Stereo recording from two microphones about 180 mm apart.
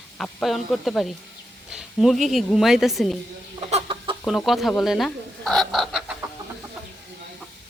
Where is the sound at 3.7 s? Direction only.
30° right (ahead or behind).